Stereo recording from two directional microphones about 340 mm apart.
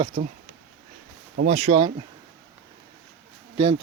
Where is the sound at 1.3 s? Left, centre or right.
Right.